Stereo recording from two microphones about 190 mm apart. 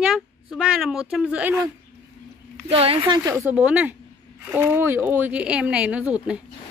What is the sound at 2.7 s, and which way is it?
Speech, 30° right (ahead or behind).